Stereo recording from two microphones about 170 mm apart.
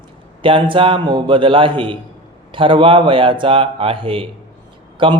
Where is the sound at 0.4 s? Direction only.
30° right (ahead or behind).